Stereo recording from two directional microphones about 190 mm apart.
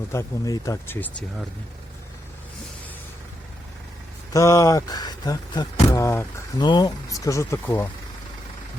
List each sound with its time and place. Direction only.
0.1 s speech: 15° left (ahead or behind)
4.3 s speech: 15° left (ahead or behind)